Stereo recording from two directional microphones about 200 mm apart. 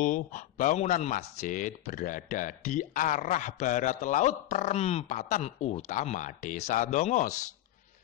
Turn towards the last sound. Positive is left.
turn(degrees=35)  # may be behind; listen again after turning